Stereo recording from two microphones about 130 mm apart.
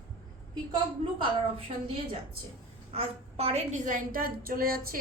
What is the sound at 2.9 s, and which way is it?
A woman's voice, 50° right (ahead or behind).